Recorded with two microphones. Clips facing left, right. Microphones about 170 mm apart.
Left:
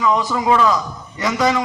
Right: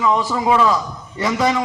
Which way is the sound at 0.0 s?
25° right (ahead or behind).